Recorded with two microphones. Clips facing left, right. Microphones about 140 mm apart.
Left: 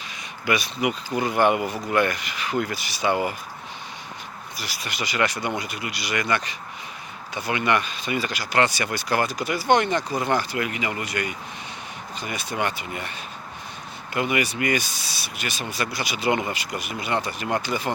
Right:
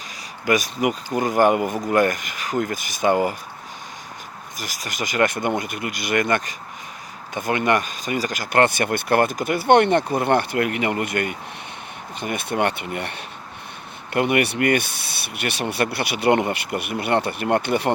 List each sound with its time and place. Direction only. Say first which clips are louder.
0.4 s speech: right 4 dB; 45° right (ahead or behind)
4.5 s speech: right 2 dB; 45° right (ahead or behind); by 17.9 s 60° right (ahead or behind)